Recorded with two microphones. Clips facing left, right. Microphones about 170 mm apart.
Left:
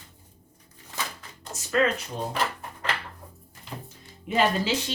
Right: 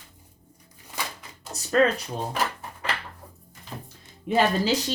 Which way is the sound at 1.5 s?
15° right (ahead or behind).